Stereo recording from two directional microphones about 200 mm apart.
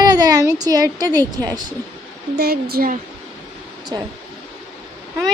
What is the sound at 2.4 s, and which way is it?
Speech, 50° right (ahead or behind).